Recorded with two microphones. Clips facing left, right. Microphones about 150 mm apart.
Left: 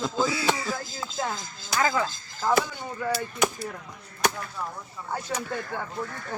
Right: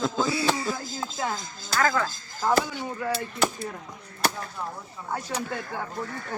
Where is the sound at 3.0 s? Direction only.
Centre (ahead or behind).